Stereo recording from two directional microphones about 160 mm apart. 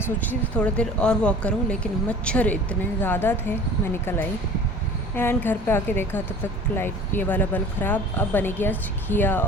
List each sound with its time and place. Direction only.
0.0 s speech: 10° left (ahead or behind)
5.1 s speech: 15° left (ahead or behind)